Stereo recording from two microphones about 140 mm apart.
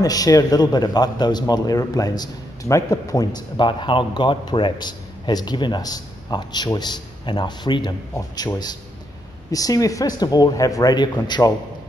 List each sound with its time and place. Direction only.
0.0 s a man's voice: 25° left (ahead or behind)
9.5 s a man's voice: 25° left (ahead or behind)